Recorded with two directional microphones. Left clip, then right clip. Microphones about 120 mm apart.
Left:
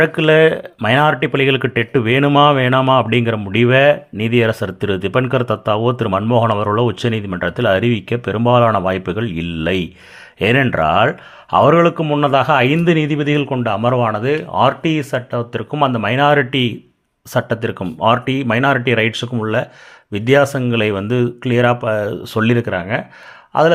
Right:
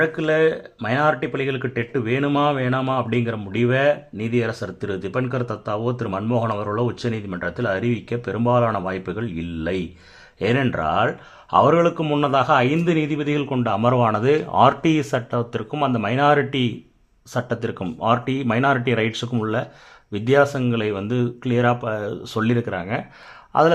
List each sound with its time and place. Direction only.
0.0 s speech: 35° left (ahead or behind); by 13.5 s 15° left (ahead or behind)
13.5 s speech: 5° left (ahead or behind)
15.8 s speech: 20° left (ahead or behind)
23.5 s speech: centre (ahead or behind)